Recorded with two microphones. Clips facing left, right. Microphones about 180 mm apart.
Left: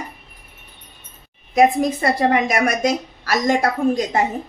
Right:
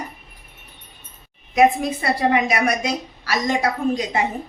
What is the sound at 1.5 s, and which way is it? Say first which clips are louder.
A woman's voice: left 1 dB; 45° left (ahead or behind).